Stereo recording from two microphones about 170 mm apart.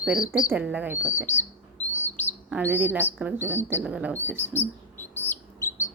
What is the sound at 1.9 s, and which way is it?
Bird, 10° left (ahead or behind).